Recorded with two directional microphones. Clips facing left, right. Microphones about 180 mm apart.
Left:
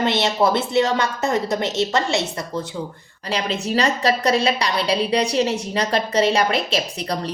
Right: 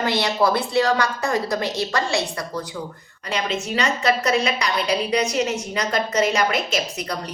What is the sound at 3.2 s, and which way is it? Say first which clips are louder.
A woman's voice: left 2 dB; 35° left (ahead or behind).